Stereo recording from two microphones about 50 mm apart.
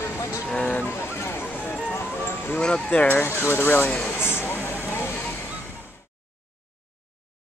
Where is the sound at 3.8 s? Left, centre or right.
Left.